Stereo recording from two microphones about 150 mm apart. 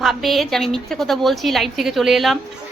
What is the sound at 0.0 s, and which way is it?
A woman's voice, centre (ahead or behind).